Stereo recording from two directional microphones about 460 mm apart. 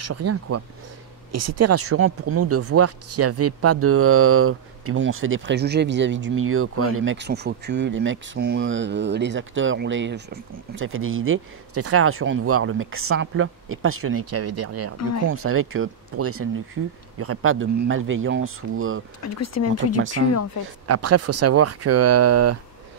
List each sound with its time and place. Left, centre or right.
0.0 s speech: right
19.2 s speech: left
20.8 s speech: right